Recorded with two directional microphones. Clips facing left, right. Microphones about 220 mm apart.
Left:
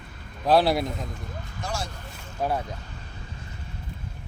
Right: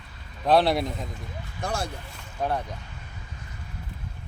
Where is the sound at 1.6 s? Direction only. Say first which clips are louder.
Right 3 dB; 55° right (ahead or behind).